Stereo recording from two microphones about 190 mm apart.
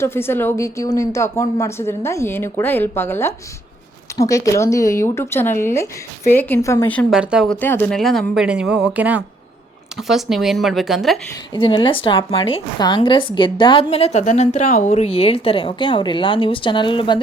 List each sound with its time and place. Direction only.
0.0 s speech: 10° left (ahead or behind)
7.1 s speech: 5° right (ahead or behind)
7.6 s speech: 10° left (ahead or behind)
11.5 s a woman's voice: 25° left (ahead or behind)